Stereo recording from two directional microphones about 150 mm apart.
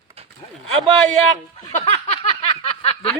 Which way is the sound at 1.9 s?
45° left (ahead or behind).